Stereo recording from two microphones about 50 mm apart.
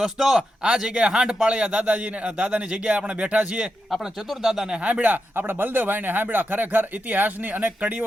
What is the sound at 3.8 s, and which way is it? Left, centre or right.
Speech, centre.